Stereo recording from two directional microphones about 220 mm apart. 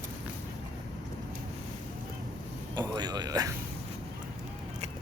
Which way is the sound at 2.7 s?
20° right (ahead or behind).